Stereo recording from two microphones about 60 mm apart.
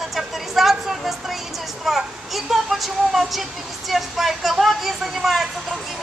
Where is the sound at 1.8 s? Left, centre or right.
Centre.